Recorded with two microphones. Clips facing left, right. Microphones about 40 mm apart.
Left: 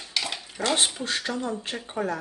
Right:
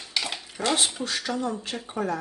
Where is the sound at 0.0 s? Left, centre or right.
Centre.